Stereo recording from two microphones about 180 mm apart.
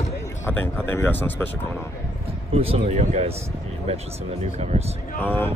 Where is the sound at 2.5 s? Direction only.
35° right (ahead or behind).